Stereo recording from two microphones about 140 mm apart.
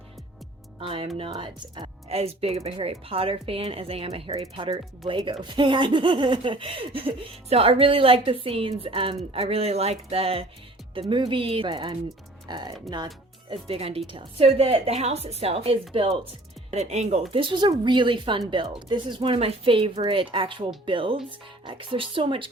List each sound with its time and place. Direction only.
0.8 s speech: 45° right (ahead or behind)
2.0 s speech: 45° right (ahead or behind)
13.5 s a woman's voice: 40° right (ahead or behind)
16.7 s a woman's voice: 55° right (ahead or behind)
17.3 s speech: 35° right (ahead or behind)